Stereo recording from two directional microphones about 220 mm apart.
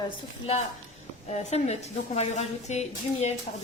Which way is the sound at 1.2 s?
30° left (ahead or behind).